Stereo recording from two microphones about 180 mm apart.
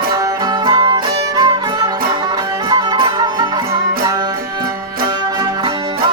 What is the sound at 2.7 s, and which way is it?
Music, 25° right (ahead or behind).